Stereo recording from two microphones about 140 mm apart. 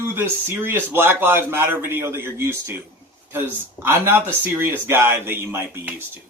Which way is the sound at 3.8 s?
15° right (ahead or behind).